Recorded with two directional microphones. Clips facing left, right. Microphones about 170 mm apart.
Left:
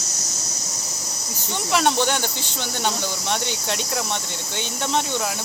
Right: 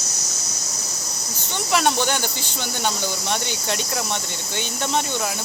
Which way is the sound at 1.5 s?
Centre (ahead or behind).